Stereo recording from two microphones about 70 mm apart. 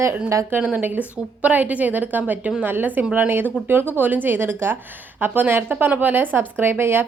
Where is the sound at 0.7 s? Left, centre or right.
Right.